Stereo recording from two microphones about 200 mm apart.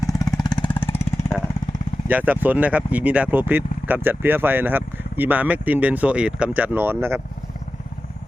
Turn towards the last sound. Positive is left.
turn(degrees=-10)  # may be behind; listen again after turning